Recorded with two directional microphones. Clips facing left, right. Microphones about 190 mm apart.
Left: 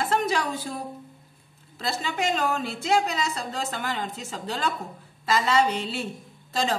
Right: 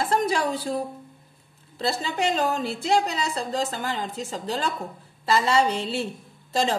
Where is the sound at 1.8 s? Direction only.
35° right (ahead or behind).